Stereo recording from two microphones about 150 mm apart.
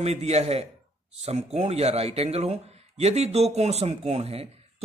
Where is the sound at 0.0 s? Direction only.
45° right (ahead or behind).